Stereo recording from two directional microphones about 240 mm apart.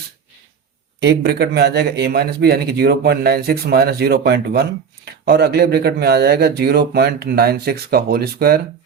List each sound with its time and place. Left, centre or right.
0.9 s speech: right